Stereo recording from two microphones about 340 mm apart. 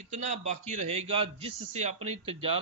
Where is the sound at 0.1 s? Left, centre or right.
Right.